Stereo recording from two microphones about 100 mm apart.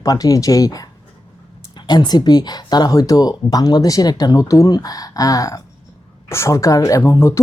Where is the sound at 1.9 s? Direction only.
45° left (ahead or behind).